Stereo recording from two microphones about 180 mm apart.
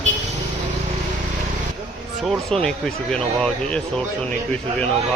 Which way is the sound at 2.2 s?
5° left (ahead or behind).